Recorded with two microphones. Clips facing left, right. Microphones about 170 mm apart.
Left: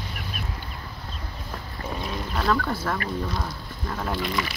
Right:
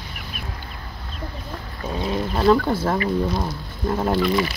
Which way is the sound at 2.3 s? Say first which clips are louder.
Right 7 dB; 30° right (ahead or behind).